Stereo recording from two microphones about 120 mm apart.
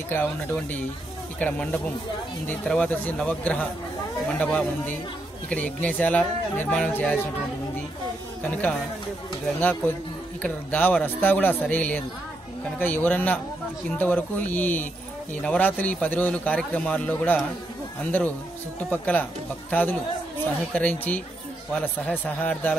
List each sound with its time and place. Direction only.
0.1 s a man's voice: 15° left (ahead or behind)
8.4 s a man's voice: 15° left (ahead or behind)
18.9 s a man's voice: 10° left (ahead or behind)